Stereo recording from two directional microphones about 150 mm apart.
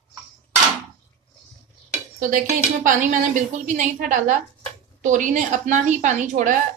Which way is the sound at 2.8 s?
55° right (ahead or behind).